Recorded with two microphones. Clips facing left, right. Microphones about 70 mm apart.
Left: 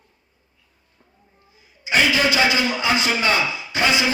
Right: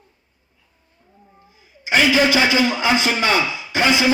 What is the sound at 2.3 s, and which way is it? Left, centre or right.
A man's voice, right.